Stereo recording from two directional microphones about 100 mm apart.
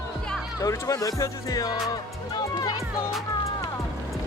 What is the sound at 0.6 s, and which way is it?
Speech, 35° left (ahead or behind).